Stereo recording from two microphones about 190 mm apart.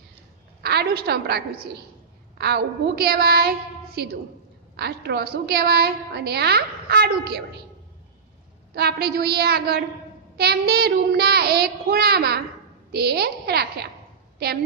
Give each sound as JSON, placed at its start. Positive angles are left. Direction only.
{"t": 0.6, "sound": "a woman's voice", "side_deg": -55}
{"t": 8.7, "sound": "a woman's voice", "side_deg": -60}